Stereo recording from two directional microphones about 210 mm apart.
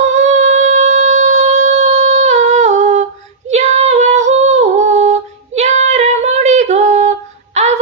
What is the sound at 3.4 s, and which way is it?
Female singing, 35° right (ahead or behind).